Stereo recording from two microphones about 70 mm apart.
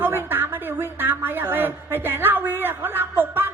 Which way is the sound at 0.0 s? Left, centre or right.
Right.